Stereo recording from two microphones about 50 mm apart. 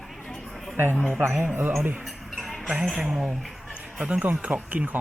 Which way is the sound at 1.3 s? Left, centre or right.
Right.